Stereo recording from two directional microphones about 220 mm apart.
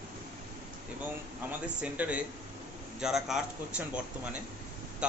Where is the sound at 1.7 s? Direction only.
5° right (ahead or behind).